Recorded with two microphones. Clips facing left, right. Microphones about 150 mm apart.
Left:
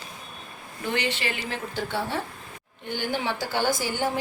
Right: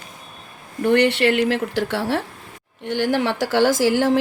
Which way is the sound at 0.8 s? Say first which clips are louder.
Right 12 dB; 60° right (ahead or behind).